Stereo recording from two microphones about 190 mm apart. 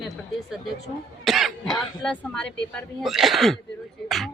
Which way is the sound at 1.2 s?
Centre (ahead or behind).